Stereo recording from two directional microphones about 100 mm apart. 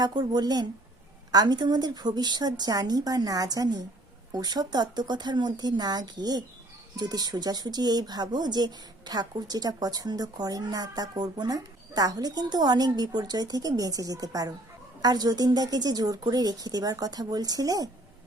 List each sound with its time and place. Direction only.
0.0 s a woman's voice: 45° right (ahead or behind)